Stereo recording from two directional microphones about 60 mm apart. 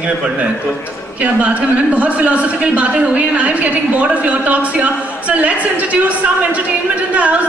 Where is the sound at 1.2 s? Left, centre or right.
Right.